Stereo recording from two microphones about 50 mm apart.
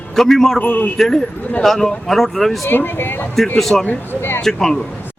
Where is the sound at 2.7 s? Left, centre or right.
Left.